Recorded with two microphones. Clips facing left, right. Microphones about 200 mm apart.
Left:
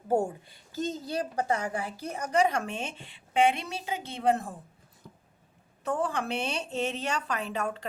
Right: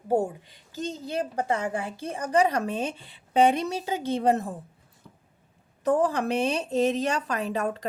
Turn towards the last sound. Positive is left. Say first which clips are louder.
# right 4 dB
turn(degrees=-40)  # may be behind; listen again after turning